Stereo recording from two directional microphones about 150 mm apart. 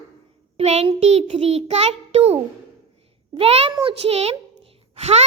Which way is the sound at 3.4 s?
40° right (ahead or behind).